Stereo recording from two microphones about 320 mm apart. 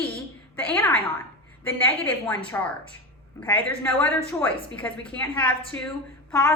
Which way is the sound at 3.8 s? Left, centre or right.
Centre.